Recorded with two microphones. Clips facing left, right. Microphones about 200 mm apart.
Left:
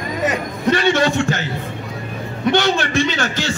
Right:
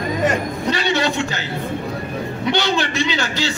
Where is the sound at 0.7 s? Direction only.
50° left (ahead or behind).